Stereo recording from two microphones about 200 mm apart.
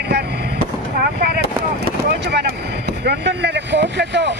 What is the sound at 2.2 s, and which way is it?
Speech, 55° right (ahead or behind).